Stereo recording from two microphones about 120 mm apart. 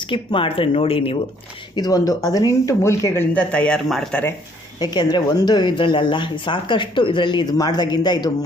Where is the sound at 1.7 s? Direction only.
30° left (ahead or behind); by 4.2 s centre (ahead or behind).